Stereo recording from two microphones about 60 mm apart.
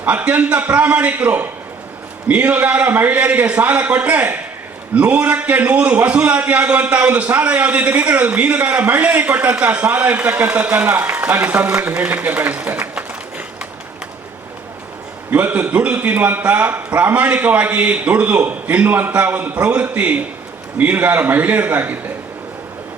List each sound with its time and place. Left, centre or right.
0.0 s a man's voice: right
15.3 s a man's voice: right